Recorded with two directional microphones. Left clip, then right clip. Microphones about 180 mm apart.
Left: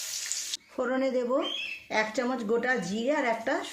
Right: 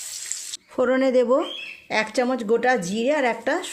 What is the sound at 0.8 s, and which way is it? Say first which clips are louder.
A woman's voice: right 9 dB; 45° right (ahead or behind).